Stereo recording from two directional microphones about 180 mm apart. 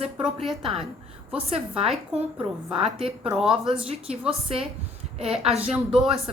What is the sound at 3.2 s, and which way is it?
Speech, 5° right (ahead or behind).